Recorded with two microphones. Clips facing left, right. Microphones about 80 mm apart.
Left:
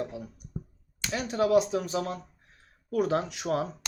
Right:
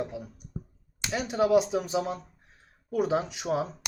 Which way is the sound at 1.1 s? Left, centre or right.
Centre.